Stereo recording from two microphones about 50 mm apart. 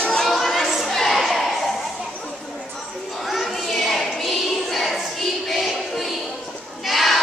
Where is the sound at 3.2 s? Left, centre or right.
Centre.